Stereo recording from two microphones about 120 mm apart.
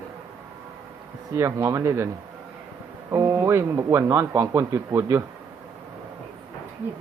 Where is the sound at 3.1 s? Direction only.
25° right (ahead or behind).